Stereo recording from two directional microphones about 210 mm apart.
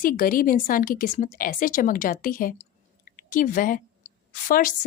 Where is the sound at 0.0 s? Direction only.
40° left (ahead or behind).